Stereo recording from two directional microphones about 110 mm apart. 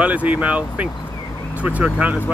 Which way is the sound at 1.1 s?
35° left (ahead or behind).